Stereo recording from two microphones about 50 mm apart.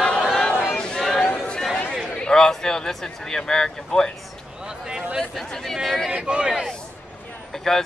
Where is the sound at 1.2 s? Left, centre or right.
Left.